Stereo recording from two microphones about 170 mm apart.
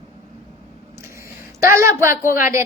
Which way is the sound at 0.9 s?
15° right (ahead or behind).